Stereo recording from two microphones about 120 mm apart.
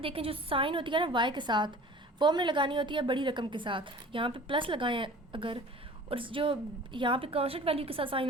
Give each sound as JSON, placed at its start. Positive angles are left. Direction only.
{"t": 0.0, "sound": "a woman's voice", "side_deg": -50}